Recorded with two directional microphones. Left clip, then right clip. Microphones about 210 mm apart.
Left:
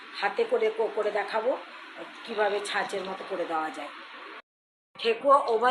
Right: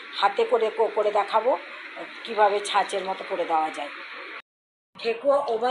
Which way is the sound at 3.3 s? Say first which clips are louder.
Right 3 dB; 20° right (ahead or behind).